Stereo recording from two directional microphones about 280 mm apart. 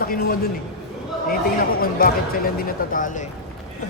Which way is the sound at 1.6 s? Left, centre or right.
Left.